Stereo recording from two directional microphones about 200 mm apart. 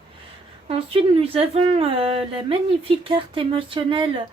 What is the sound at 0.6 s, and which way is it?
Speech, 30° right (ahead or behind).